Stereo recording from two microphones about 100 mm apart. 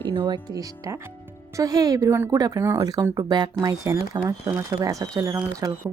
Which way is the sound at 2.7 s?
40° right (ahead or behind).